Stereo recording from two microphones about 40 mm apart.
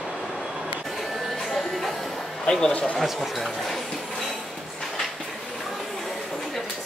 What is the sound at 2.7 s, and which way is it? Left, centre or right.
Speech, left.